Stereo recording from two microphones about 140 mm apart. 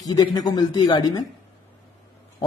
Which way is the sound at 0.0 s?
30° left (ahead or behind).